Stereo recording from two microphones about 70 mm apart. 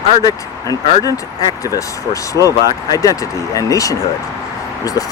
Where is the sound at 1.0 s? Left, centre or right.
Left.